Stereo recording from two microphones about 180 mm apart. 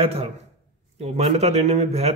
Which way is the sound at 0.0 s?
30° right (ahead or behind).